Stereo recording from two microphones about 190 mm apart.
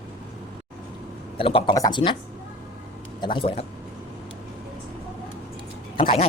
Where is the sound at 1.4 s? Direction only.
30° left (ahead or behind).